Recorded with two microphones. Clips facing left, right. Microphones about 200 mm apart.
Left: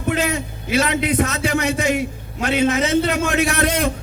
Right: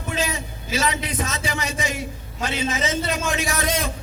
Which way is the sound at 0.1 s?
60° left (ahead or behind).